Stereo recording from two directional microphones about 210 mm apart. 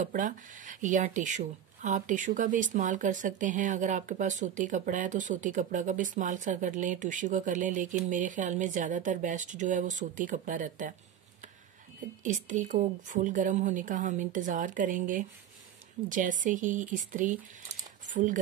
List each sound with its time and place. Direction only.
0.0 s speech: 40° right (ahead or behind)
12.2 s speech: 35° right (ahead or behind)